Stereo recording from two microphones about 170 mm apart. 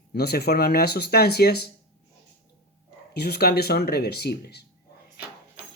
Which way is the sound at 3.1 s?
70° left (ahead or behind).